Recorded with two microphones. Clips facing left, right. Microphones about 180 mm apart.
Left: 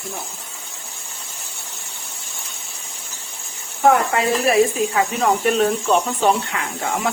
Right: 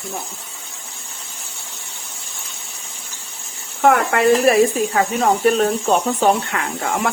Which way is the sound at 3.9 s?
70° right (ahead or behind).